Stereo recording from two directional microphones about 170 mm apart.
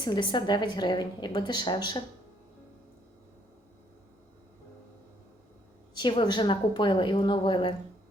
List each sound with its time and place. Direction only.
0.0 s a woman's voice: 25° left (ahead or behind)
5.9 s a woman's voice: 25° left (ahead or behind)